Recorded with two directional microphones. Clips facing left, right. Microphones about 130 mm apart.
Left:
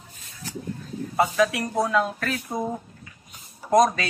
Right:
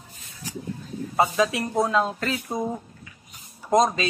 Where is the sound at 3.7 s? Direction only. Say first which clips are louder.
Left 1 dB; 20° right (ahead or behind).